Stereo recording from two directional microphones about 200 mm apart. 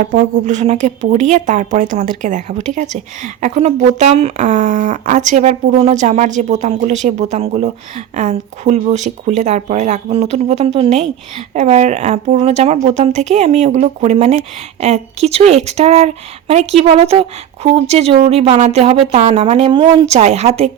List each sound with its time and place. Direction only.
0.0 s a woman's voice: 40° right (ahead or behind)